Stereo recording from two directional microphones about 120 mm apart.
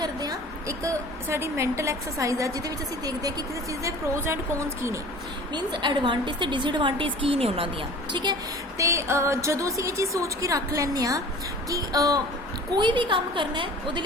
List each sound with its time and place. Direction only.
0.0 s a woman's voice: 35° right (ahead or behind)
5.5 s a woman's voice: 40° right (ahead or behind)
8.1 s a woman's voice: 35° right (ahead or behind)
8.8 s a woman's voice: 25° right (ahead or behind); by 14.0 s 40° right (ahead or behind)